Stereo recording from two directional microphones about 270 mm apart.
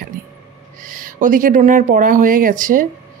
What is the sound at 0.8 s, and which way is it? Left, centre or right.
Speech, right.